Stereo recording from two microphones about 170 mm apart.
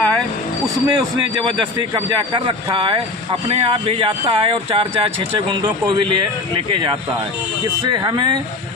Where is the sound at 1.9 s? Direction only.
30° right (ahead or behind).